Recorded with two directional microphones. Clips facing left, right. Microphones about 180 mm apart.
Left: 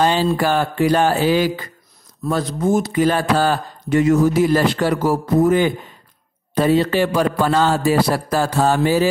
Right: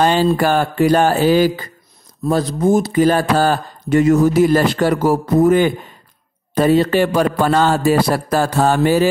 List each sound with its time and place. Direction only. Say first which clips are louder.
0.0 s speech: right 3 dB; 50° right (ahead or behind)